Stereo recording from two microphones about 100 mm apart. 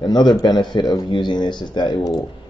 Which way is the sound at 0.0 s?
45° left (ahead or behind).